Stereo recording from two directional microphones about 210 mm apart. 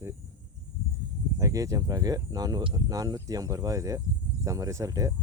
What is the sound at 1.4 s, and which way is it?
Speech, 15° right (ahead or behind).